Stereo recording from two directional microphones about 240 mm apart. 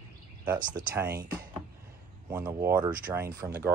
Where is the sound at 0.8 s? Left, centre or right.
Right.